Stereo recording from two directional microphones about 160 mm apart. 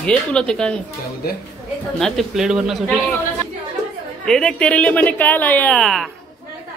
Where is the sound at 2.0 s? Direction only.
Centre (ahead or behind).